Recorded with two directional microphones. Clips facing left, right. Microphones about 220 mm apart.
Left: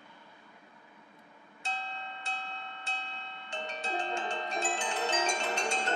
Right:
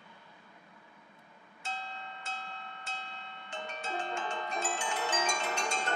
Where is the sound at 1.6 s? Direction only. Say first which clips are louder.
Left 2 dB; 30° left (ahead or behind).